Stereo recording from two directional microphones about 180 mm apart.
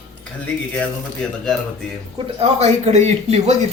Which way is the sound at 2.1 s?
30° right (ahead or behind).